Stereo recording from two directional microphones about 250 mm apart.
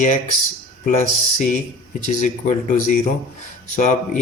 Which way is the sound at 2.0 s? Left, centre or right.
Left.